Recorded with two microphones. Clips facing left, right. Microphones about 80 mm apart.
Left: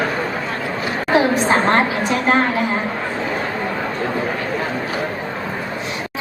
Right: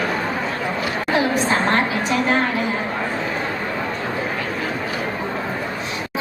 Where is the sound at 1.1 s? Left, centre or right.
Left.